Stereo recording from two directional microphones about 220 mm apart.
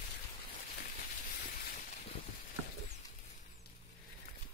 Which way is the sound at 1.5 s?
40° left (ahead or behind).